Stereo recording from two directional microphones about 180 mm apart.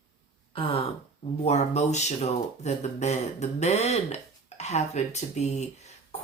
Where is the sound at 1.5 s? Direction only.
40° left (ahead or behind).